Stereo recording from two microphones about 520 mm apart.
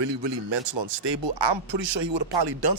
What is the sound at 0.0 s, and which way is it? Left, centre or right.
A man's voice, right.